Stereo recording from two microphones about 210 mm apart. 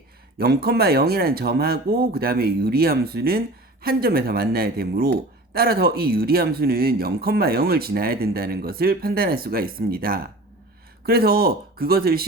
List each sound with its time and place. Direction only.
0.3 s speech: 45° right (ahead or behind)